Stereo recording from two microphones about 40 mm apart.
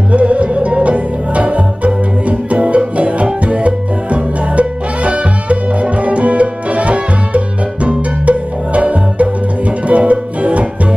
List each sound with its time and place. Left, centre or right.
0.1 s music: right